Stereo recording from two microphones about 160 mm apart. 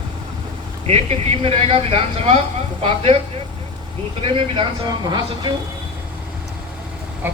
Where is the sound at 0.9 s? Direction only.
40° right (ahead or behind).